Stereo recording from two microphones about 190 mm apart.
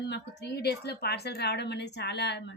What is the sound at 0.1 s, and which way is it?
A woman's voice, 60° left (ahead or behind).